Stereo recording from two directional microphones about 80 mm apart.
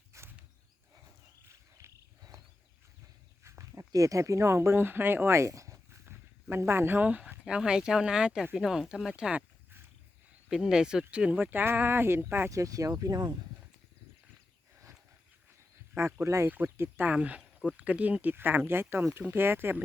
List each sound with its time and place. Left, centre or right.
0.1 s a sound: right
1.8 s a sound: right
3.4 s speech: right
6.1 s speech: right; by 9.4 s centre
10.5 s speech: centre; by 12.5 s right
12.5 s speech: right
16.0 s speech: right
17.2 s speech: centre; by 19.8 s right